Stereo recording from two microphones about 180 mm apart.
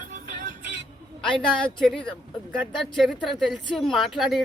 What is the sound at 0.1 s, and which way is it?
Music, 45° right (ahead or behind).